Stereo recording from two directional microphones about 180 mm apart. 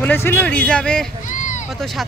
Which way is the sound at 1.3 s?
45° left (ahead or behind).